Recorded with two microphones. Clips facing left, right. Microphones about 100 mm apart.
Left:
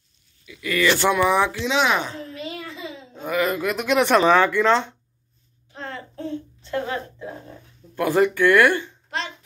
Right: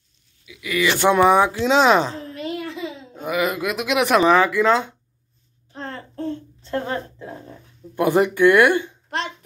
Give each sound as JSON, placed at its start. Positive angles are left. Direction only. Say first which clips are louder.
{"t": 0.5, "sound": "speech", "louder": "left 1 dB", "side_deg": -10}
{"t": 1.6, "sound": "speech", "louder": "right 6 dB", "side_deg": -40}
{"t": 2.3, "sound": "a sound", "louder": "right 5 dB", "side_deg": -60}
{"t": 3.2, "sound": "speech", "louder": "even", "side_deg": -10}
{"t": 5.7, "sound": "a sound", "louder": "right 1 dB", "side_deg": -35}
{"t": 7.9, "sound": "speech", "louder": "right 1 dB", "side_deg": -20}